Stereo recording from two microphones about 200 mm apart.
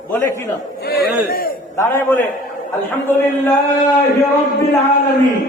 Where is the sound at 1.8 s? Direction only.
10° left (ahead or behind).